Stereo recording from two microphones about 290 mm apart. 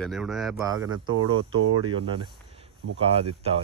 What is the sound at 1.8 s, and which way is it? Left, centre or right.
Speech, centre.